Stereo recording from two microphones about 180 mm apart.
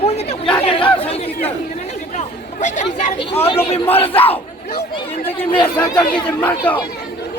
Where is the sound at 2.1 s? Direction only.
40° left (ahead or behind).